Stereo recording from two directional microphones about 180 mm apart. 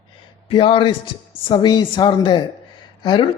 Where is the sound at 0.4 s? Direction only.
30° left (ahead or behind).